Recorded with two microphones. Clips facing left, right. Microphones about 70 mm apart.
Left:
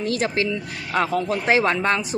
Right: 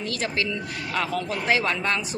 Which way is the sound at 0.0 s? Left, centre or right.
Left.